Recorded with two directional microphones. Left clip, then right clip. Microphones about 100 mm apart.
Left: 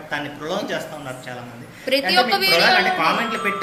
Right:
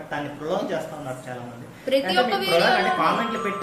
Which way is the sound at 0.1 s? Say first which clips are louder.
Left 2 dB; 30° right (ahead or behind).